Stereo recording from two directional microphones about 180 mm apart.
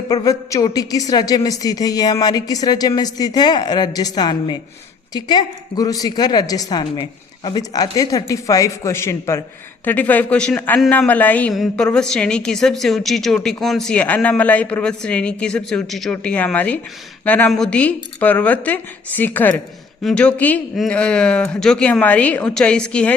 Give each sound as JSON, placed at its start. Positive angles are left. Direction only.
{"t": 0.1, "sound": "a woman's voice", "side_deg": 20}